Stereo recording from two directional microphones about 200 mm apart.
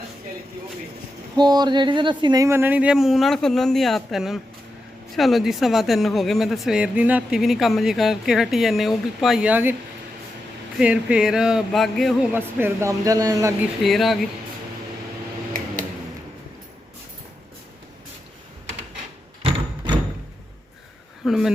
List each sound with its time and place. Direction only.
1.4 s speech: 20° right (ahead or behind)
10.8 s speech: 5° right (ahead or behind)
12.3 s speech: 10° right (ahead or behind)
13.8 s speech: centre (ahead or behind)
19.4 s a sound: 25° right (ahead or behind)
21.2 s speech: centre (ahead or behind)